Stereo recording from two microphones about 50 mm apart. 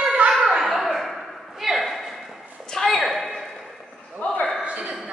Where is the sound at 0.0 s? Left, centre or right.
Centre.